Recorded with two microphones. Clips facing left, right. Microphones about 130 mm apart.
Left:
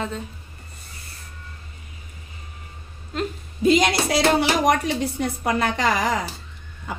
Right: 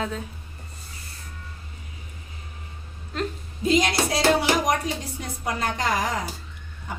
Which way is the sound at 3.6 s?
80° left.